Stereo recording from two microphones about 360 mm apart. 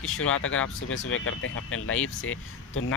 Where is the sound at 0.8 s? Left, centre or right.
Left.